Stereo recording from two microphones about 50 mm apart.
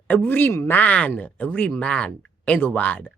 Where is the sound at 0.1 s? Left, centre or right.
Left.